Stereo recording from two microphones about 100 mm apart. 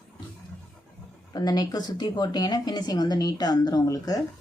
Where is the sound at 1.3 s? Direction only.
45° left (ahead or behind).